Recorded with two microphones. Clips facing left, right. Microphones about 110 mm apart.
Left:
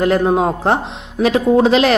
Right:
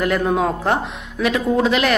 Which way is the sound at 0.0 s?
30° left (ahead or behind).